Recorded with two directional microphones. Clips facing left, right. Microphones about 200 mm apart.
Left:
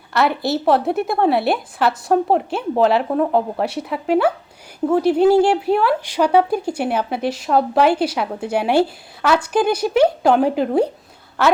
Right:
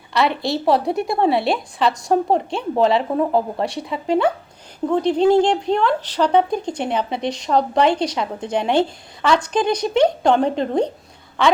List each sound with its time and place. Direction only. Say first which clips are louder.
0.1 s speech: left 1 dB; centre (ahead or behind)